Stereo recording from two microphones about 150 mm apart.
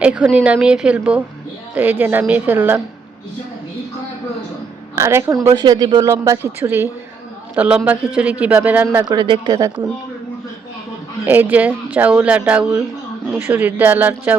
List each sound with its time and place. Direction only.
0.0 s speech: 5° right (ahead or behind)
4.9 s a woman's voice: 20° right (ahead or behind)
9.0 s speech: 30° right (ahead or behind)
9.6 s a woman's voice: 20° right (ahead or behind)
11.3 s speech: 10° right (ahead or behind)